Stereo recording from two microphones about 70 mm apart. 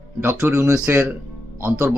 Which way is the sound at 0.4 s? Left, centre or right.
Right.